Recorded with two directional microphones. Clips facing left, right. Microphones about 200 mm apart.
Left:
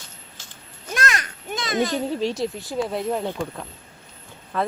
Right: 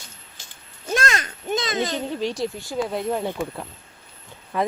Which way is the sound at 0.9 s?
25° right (ahead or behind).